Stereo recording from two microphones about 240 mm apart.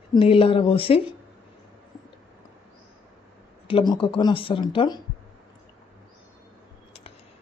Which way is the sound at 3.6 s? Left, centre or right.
Centre.